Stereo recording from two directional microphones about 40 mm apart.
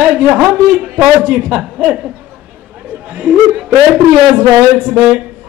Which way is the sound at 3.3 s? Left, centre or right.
Right.